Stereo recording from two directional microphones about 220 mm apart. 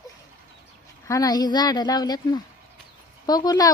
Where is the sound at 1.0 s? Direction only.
15° left (ahead or behind).